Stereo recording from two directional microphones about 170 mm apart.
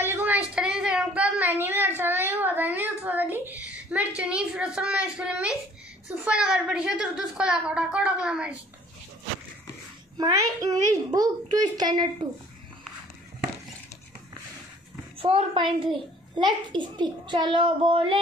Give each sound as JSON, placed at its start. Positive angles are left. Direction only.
{"t": 0.0, "sound": "a sound", "side_deg": -10}
{"t": 0.6, "sound": "a woman's voice", "side_deg": -5}
{"t": 10.1, "sound": "a child's voice", "side_deg": -20}
{"t": 15.1, "sound": "a woman's voice", "side_deg": -35}